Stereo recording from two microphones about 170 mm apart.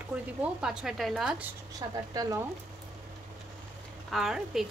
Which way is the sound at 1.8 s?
25° right (ahead or behind).